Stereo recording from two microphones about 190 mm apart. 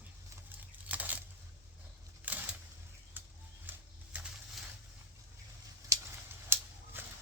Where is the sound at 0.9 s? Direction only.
10° right (ahead or behind).